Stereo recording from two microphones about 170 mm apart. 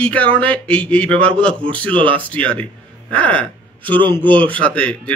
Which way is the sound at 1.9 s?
30° right (ahead or behind).